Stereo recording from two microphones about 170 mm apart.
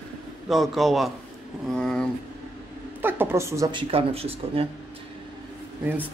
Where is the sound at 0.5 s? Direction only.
Centre (ahead or behind).